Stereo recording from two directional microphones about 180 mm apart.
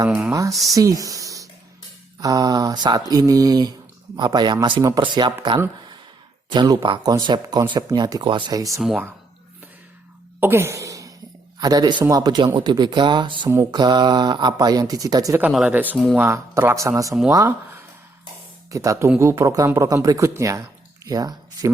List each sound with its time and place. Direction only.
0.1 s speech: 5° right (ahead or behind)
0.7 s speech: 20° right (ahead or behind)
8.8 s speech: centre (ahead or behind)
10.4 s a sound: 15° right (ahead or behind)
11.6 s speech: 20° right (ahead or behind)
15.3 s speech: 10° right (ahead or behind)
18.7 s speech: 15° right (ahead or behind)